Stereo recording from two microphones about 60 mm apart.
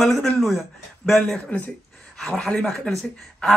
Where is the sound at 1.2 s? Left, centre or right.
Left.